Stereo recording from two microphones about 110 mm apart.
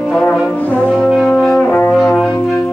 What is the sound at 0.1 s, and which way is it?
Brass instrument, 10° left (ahead or behind).